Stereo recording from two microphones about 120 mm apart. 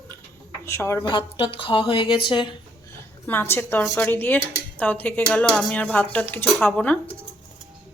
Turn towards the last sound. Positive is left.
turn(degrees=15)  # may be behind; listen again after turning